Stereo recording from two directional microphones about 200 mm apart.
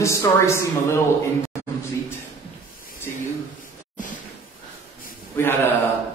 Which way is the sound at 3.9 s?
40° left (ahead or behind).